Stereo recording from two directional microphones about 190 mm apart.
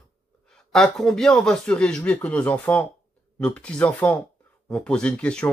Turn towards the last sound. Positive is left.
turn(degrees=5)  # may be behind; listen again after turning